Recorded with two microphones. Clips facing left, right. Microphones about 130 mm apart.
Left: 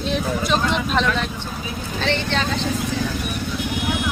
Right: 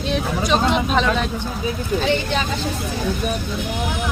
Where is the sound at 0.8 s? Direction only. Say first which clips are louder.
Right 2 dB; centre (ahead or behind).